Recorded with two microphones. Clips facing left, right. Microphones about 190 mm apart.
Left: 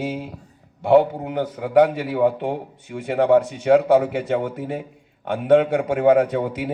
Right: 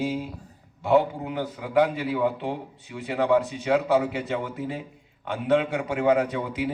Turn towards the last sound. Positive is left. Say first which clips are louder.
# left 4 dB
turn(degrees=50)  # may be behind; listen again after turning